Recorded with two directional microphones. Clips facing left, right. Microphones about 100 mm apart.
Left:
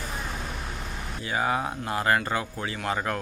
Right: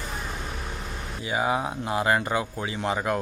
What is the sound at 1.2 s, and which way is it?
Speech, 15° right (ahead or behind).